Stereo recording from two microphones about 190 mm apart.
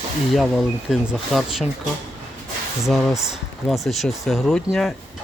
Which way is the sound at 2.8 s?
Centre (ahead or behind).